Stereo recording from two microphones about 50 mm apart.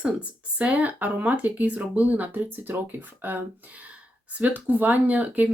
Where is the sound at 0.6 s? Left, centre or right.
Right.